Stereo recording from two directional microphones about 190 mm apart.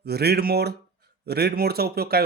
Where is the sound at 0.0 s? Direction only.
55° right (ahead or behind).